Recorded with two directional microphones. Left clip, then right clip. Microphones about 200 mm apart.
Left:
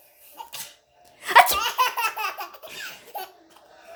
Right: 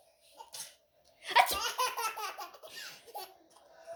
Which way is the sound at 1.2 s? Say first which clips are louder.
Left 11 dB; 40° left (ahead or behind).